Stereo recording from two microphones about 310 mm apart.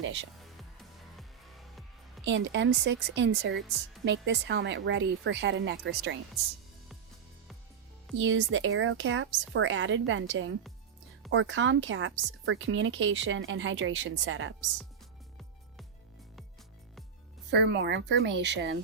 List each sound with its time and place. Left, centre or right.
0.8 s music: centre
2.2 s a woman's voice: right
8.2 s a woman's voice: right
17.5 s a woman's voice: right